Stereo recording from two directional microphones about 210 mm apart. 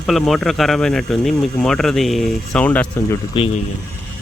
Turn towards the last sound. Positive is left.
turn(degrees=25)  # may be behind; listen again after turning